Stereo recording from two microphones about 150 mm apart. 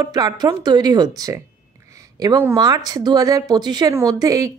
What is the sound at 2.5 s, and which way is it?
A woman's voice, 25° right (ahead or behind).